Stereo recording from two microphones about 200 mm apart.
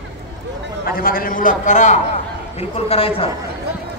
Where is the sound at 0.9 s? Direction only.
45° left (ahead or behind); by 3.3 s 30° left (ahead or behind).